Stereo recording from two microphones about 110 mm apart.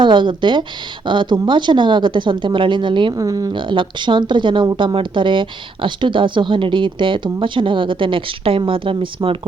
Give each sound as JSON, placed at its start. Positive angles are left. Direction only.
{"t": 0.0, "sound": "speech", "side_deg": -45}
{"t": 3.2, "sound": "speech", "side_deg": -35}
{"t": 3.5, "sound": "speech", "side_deg": -45}